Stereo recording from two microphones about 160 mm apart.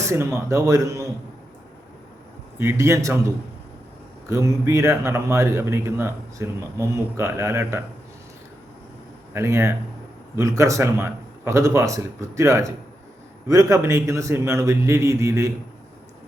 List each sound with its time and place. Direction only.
0.1 s a man's voice: 15° right (ahead or behind)
2.6 s a man's voice: 15° right (ahead or behind)
9.3 s a man's voice: 15° right (ahead or behind)